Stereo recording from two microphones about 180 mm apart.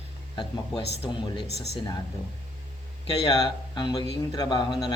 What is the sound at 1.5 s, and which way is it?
Speech, 35° right (ahead or behind).